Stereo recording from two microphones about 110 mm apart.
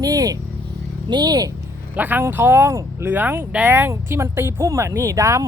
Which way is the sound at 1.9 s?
15° right (ahead or behind).